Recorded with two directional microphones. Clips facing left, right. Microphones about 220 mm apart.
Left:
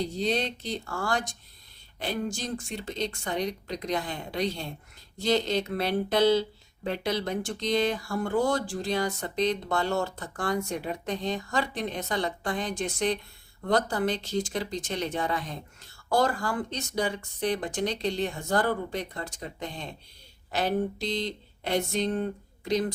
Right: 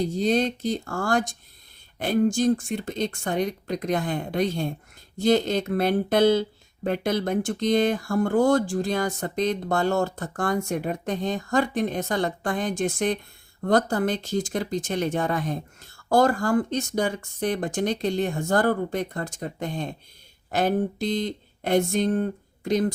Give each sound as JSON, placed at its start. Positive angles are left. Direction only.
{"t": 0.0, "sound": "speech", "side_deg": -45}